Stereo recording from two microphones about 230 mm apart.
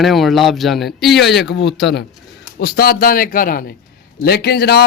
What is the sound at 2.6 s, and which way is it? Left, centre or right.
Speech, left.